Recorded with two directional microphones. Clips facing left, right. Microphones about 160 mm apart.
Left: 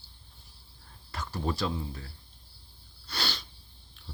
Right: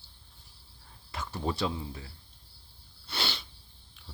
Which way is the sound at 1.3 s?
15° right (ahead or behind).